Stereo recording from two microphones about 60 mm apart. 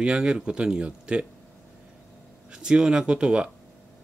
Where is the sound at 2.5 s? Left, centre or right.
Centre.